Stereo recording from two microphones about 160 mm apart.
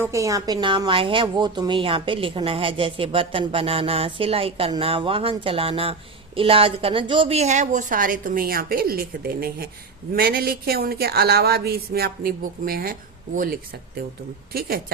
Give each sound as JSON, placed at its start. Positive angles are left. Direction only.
{"t": 0.0, "sound": "a woman's voice", "side_deg": -20}